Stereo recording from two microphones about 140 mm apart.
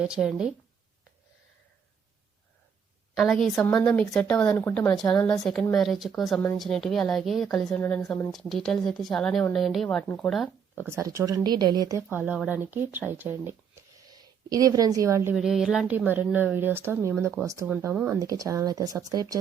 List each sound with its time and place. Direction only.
0.0 s speech: 5° right (ahead or behind)
3.2 s speech: centre (ahead or behind)
10.8 s speech: 20° right (ahead or behind)
12.0 s a woman's voice: 10° right (ahead or behind)
14.5 s speech: 25° right (ahead or behind)
15.4 s a woman's voice: 5° right (ahead or behind); by 19.4 s 25° right (ahead or behind)